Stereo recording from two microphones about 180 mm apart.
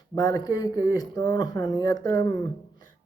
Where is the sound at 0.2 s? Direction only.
20° left (ahead or behind).